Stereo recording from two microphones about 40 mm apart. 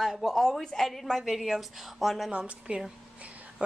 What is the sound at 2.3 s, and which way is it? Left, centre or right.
Speech, right.